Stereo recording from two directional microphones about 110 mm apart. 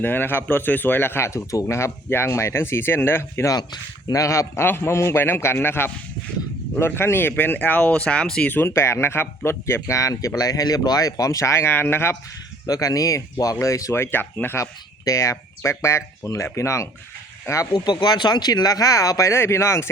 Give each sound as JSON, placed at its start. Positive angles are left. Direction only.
{"t": 0.0, "sound": "speech", "side_deg": 20}
{"t": 3.5, "sound": "speech", "side_deg": 35}
{"t": 8.5, "sound": "speech", "side_deg": 25}
{"t": 12.6, "sound": "speech", "side_deg": 35}
{"t": 17.7, "sound": "speech", "side_deg": 40}